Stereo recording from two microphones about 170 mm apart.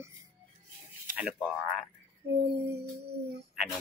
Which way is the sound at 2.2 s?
75° right (ahead or behind).